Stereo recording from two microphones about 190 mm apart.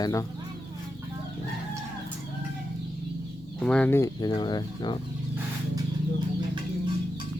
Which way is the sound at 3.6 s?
5° left (ahead or behind).